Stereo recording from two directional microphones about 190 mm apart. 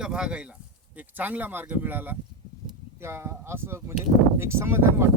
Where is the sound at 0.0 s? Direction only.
5° right (ahead or behind).